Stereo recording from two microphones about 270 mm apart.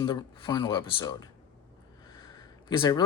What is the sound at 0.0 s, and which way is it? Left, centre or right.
Speech, centre.